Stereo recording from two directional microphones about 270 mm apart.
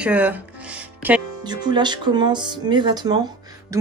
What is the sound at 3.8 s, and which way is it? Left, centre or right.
Music, centre.